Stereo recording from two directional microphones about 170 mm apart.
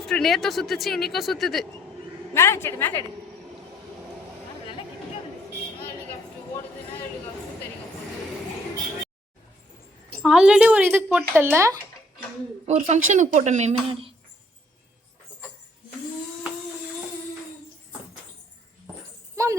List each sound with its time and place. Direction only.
0.0 s speech: centre (ahead or behind)
2.3 s a woman's voice: 15° left (ahead or behind)
10.2 s speech: 5° right (ahead or behind)
12.6 s speech: 45° right (ahead or behind)
19.4 s jingle bell: 20° right (ahead or behind)